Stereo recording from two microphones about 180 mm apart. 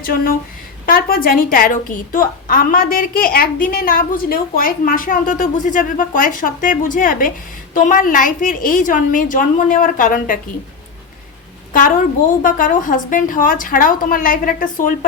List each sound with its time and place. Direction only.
0.0 s a woman's voice: 55° left (ahead or behind)
12.4 s a woman's voice: 50° left (ahead or behind)